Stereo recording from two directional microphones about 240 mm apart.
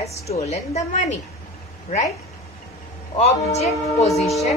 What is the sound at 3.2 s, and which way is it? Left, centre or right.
A woman's voice, left.